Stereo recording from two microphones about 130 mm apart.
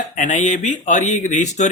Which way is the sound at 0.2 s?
70° left (ahead or behind).